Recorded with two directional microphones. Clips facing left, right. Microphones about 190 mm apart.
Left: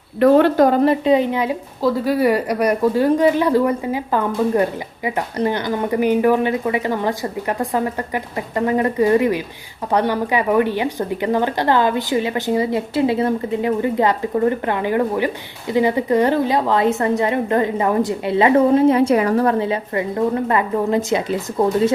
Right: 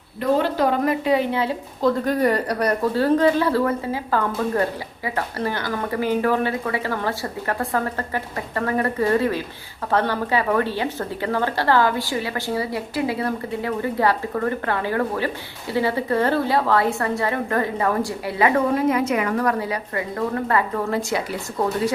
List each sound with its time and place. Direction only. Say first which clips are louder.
0.2 s a woman's voice: left 8 dB; 65° left (ahead or behind); by 0.8 s 45° left (ahead or behind)
0.8 s a woman's voice: left 5 dB; 25° left (ahead or behind)